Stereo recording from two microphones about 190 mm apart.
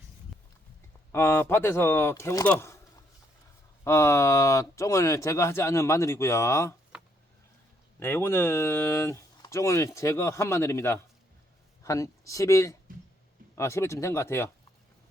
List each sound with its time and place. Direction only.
1.1 s speech: 10° left (ahead or behind)
3.8 s speech: 15° left (ahead or behind)
7.9 s speech: 10° left (ahead or behind)